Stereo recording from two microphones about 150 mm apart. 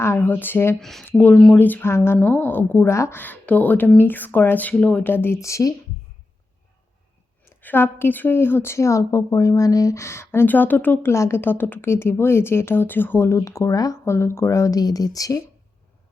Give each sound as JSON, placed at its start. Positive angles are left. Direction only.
{"t": 0.0, "sound": "a woman's voice", "side_deg": 15}
{"t": 0.8, "sound": "a woman's voice", "side_deg": 0}
{"t": 7.4, "sound": "a woman's voice", "side_deg": 15}